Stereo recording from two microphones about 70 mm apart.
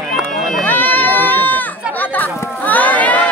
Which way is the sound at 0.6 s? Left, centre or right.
Left.